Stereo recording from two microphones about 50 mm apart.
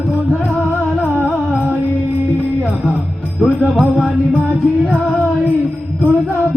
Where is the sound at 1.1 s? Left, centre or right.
Right.